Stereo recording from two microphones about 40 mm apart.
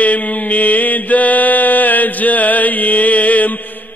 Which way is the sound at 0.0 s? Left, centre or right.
Left.